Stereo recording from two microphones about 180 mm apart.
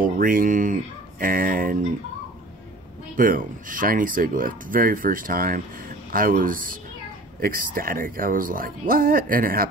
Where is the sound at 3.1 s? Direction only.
50° right (ahead or behind).